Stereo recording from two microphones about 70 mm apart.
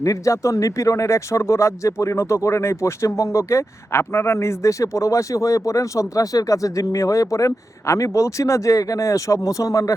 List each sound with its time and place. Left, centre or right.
0.0 s speech: left